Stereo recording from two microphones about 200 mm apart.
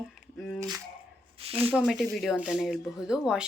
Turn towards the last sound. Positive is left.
turn(degrees=-5)  # may be behind; listen again after turning